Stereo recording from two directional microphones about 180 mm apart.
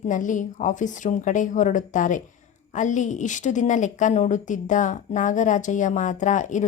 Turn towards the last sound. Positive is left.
turn(degrees=45)  # may be behind; listen again after turning